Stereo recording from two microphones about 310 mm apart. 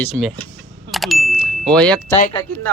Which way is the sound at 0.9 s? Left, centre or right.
Centre.